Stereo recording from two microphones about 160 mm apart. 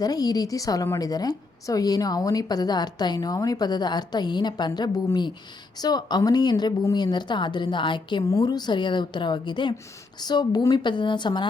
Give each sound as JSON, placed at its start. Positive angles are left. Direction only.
{"t": 0.0, "sound": "a woman's voice", "side_deg": 25}